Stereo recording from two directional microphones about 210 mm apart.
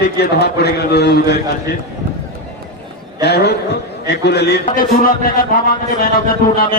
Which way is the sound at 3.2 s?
50° left (ahead or behind).